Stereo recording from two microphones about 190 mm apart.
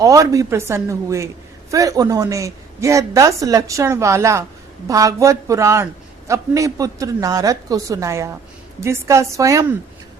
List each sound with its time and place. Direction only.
0.0 s a man's voice: 20° right (ahead or behind)